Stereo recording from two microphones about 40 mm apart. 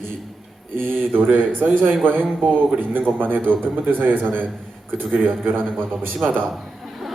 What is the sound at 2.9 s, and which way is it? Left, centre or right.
A man's voice, right.